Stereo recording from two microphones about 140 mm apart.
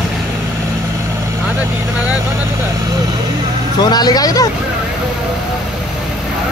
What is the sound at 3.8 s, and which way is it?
Speech, 30° left (ahead or behind).